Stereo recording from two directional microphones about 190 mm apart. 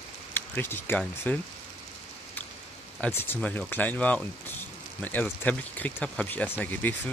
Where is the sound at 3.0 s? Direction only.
10° left (ahead or behind).